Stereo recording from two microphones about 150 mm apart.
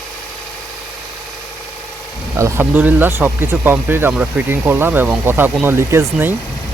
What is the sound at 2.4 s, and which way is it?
Speech, 15° right (ahead or behind).